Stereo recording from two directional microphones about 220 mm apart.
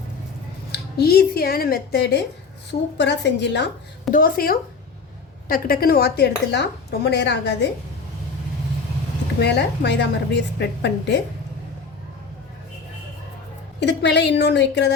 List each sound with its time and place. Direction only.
0.7 s dishes: 45° left (ahead or behind)
4.1 s speech: 40° left (ahead or behind)
5.5 s dishes: 40° left (ahead or behind)
9.4 s dishes: 50° left (ahead or behind)
13.7 s dishes: 50° left (ahead or behind)